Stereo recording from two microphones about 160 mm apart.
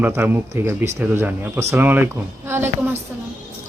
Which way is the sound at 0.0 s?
10° right (ahead or behind).